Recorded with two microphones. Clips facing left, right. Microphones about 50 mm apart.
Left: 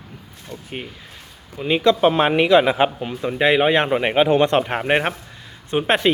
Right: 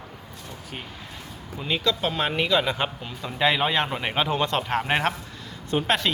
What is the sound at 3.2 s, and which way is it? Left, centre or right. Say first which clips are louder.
Speech: left 6 dB; left.